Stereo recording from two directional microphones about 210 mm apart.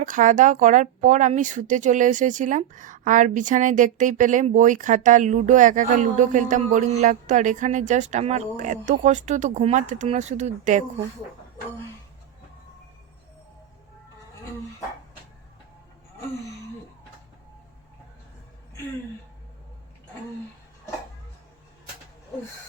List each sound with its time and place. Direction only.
0.0 s speech: 40° right (ahead or behind)